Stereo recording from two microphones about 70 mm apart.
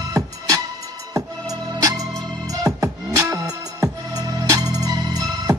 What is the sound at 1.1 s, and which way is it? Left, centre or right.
Music, right.